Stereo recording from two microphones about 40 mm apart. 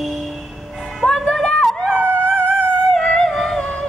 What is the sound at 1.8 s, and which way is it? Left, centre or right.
Howl, left.